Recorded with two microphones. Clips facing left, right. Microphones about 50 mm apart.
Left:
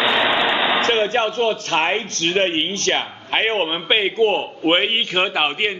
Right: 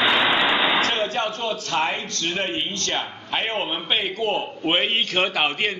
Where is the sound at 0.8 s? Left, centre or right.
Left.